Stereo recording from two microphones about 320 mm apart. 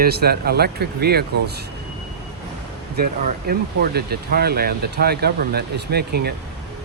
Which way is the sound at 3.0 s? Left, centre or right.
Right.